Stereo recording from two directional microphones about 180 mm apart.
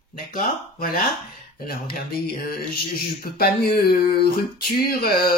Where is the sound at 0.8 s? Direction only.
55° left (ahead or behind).